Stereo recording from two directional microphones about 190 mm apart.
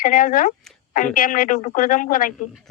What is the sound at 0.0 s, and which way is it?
Speech, 45° left (ahead or behind).